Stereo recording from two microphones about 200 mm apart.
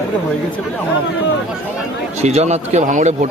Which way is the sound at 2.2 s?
30° right (ahead or behind).